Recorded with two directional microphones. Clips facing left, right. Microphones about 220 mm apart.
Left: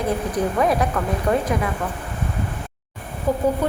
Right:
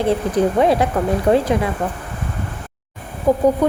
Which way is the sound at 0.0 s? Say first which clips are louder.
Right 5 dB; 30° right (ahead or behind).